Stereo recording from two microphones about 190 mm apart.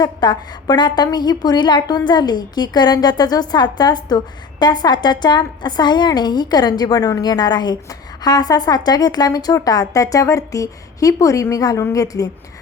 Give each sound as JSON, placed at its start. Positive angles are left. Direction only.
{"t": 0.0, "sound": "a woman's voice", "side_deg": 20}